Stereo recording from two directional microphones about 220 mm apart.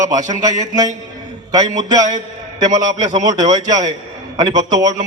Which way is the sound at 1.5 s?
20° right (ahead or behind).